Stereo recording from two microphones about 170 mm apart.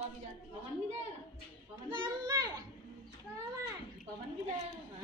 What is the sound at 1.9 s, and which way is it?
Children playing, 25° right (ahead or behind).